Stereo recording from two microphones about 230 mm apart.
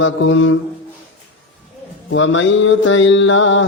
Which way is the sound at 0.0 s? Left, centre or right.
Left.